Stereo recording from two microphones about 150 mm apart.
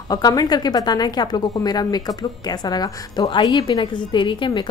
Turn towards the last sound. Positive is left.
turn(degrees=35)  # may be behind; listen again after turning